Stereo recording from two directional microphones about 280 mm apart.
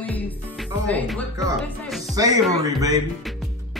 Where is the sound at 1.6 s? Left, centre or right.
Centre.